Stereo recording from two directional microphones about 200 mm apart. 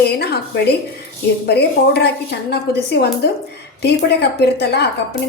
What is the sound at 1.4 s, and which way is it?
A woman's voice, 55° left (ahead or behind).